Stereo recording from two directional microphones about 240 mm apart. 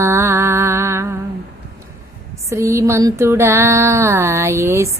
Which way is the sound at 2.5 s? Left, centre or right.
Centre.